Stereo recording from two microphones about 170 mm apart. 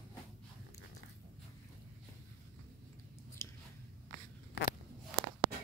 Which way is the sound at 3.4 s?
15° left (ahead or behind).